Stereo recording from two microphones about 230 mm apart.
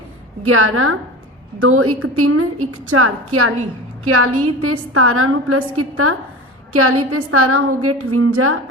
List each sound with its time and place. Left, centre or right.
0.4 s a woman's voice: right